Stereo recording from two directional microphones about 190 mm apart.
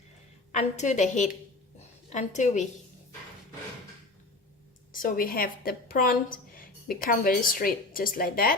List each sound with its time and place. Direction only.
0.5 s a woman's voice: 40° left (ahead or behind)
4.9 s a woman's voice: 45° left (ahead or behind)